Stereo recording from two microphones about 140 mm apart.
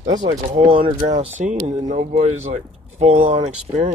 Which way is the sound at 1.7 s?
55° right (ahead or behind).